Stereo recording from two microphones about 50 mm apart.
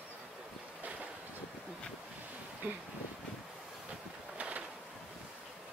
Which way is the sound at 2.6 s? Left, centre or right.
Right.